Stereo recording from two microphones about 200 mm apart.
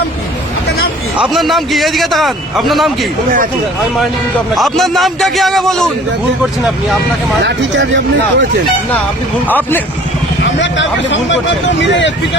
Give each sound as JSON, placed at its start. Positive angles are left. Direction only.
{"t": 1.2, "sound": "a man's voice", "side_deg": 0}
{"t": 4.5, "sound": "a man's voice", "side_deg": 0}
{"t": 7.4, "sound": "speech", "side_deg": -65}
{"t": 9.5, "sound": "speech", "side_deg": 10}
{"t": 10.4, "sound": "speech", "side_deg": 65}